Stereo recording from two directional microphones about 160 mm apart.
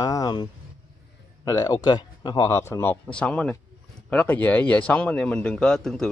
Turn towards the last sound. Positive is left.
turn(degrees=5)  # may be behind; listen again after turning